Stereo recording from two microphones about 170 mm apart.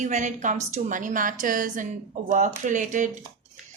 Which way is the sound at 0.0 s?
45° right (ahead or behind).